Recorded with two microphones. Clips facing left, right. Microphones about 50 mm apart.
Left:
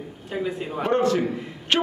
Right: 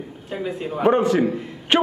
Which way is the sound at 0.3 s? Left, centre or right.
Centre.